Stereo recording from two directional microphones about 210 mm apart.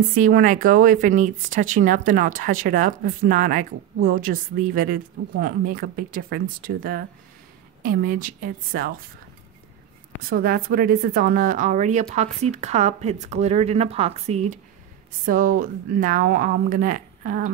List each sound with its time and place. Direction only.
0.1 s speech: 40° right (ahead or behind)
10.2 s speech: 45° right (ahead or behind)